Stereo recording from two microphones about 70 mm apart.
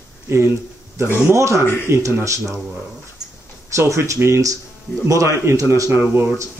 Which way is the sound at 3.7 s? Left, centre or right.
Right.